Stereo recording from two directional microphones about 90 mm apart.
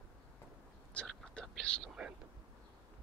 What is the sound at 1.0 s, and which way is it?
Whispering, 10° left (ahead or behind).